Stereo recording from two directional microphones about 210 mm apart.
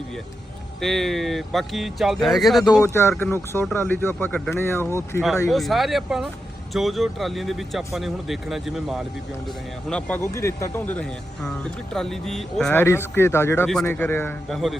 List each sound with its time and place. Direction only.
0.8 s speech: centre (ahead or behind)
2.6 s speech: 15° left (ahead or behind)
5.5 s speech: centre (ahead or behind)
9.9 s speech: 10° left (ahead or behind)